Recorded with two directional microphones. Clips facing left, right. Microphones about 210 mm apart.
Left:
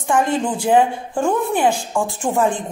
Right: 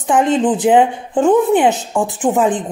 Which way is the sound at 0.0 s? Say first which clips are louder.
Right 5 dB; 20° right (ahead or behind).